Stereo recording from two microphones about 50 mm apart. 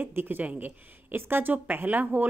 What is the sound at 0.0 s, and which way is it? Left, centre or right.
Speech, right.